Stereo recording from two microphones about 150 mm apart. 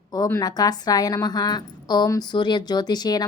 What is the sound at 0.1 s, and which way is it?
A woman's voice, 25° left (ahead or behind).